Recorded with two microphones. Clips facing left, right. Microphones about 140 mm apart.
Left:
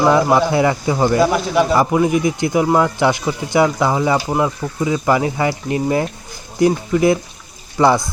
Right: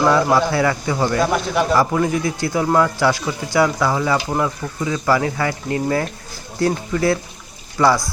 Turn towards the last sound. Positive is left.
turn(degrees=20)  # may be behind; listen again after turning